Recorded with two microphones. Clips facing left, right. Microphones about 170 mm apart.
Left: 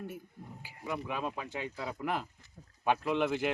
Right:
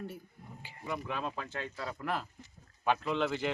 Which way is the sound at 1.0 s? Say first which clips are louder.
Left 1 dB; 10° left (ahead or behind).